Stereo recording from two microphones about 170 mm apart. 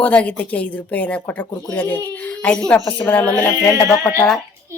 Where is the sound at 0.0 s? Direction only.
10° left (ahead or behind).